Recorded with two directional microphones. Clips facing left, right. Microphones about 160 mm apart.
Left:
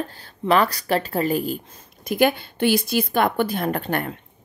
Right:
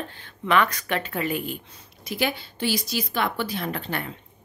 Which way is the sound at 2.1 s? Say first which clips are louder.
Left 8 dB; 50° left (ahead or behind).